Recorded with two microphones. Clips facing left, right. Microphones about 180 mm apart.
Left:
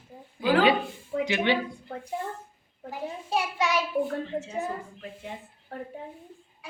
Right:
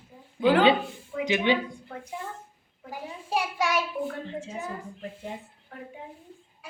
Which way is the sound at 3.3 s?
10° right (ahead or behind).